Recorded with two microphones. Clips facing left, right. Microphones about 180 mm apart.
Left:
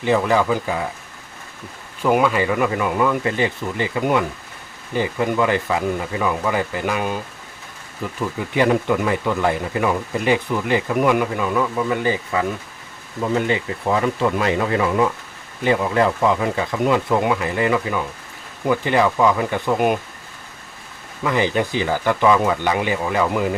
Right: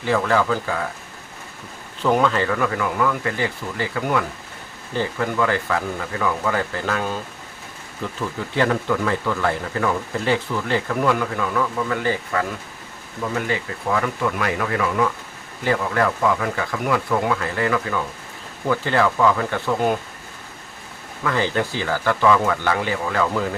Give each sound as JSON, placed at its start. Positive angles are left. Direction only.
{"t": 0.0, "sound": "speech", "side_deg": 15}
{"t": 2.0, "sound": "speech", "side_deg": 10}
{"t": 21.2, "sound": "speech", "side_deg": 15}